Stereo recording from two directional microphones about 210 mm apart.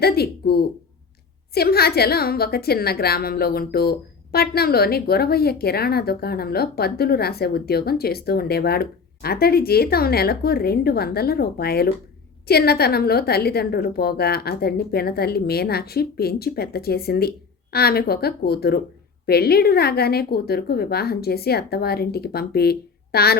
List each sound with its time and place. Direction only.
0.0 s a woman's voice: 50° left (ahead or behind)